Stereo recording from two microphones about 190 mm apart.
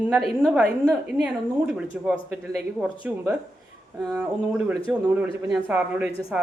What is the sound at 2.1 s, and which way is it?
A woman's voice, 5° right (ahead or behind).